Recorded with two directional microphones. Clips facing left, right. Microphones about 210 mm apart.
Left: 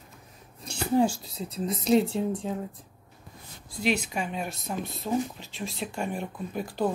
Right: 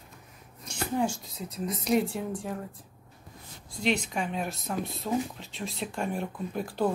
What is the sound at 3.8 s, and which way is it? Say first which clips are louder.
Speech: left 1 dB; 5° left (ahead or behind).